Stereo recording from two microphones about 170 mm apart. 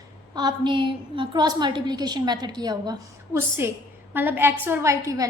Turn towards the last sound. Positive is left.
turn(degrees=-20)  # may be behind; listen again after turning